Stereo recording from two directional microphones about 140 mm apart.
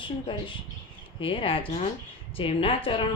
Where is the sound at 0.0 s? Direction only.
35° left (ahead or behind).